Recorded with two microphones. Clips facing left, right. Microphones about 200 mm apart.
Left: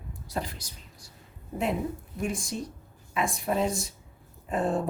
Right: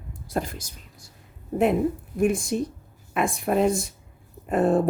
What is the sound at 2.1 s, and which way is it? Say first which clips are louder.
A woman's voice: right 10 dB; 55° right (ahead or behind).